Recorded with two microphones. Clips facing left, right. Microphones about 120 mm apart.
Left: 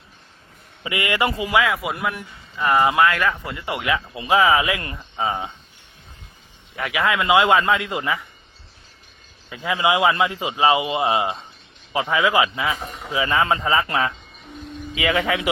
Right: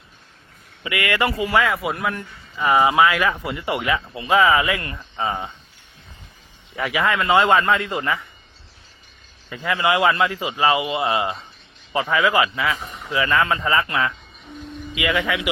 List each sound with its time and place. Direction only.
0.9 s a man's voice: 20° left (ahead or behind)
1.5 s speech: centre (ahead or behind)
4.1 s speech: 15° left (ahead or behind)
6.7 s speech: centre (ahead or behind)
7.2 s speech: 10° left (ahead or behind)
9.6 s a man's voice: 15° left (ahead or behind)